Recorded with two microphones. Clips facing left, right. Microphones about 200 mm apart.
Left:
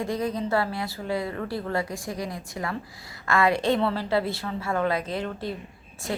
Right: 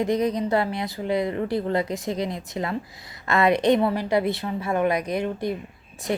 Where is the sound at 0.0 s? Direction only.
20° right (ahead or behind).